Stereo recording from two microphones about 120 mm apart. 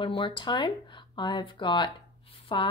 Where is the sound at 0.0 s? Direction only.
45° left (ahead or behind).